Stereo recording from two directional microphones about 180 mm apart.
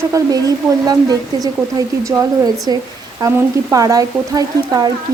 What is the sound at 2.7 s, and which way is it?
Speech, 20° right (ahead or behind).